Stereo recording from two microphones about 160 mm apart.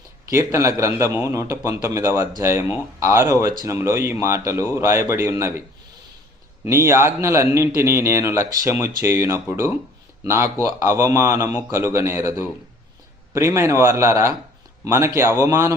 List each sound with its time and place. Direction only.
0.3 s a man's voice: 15° right (ahead or behind)
6.7 s a man's voice: 15° right (ahead or behind)